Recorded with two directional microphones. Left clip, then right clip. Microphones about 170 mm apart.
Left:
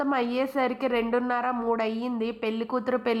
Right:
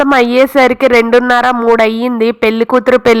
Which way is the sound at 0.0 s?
35° right (ahead or behind).